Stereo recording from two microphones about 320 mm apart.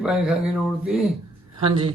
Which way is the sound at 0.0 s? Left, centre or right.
Centre.